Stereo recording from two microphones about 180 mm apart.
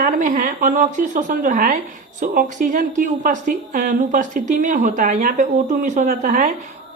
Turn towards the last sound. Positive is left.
turn(degrees=-45)  # may be behind; listen again after turning